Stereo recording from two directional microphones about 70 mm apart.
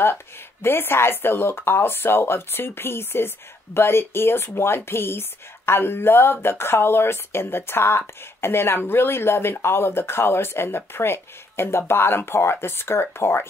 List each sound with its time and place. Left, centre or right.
0.0 s speech: left